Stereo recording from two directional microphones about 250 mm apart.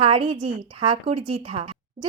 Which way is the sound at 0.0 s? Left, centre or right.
Right.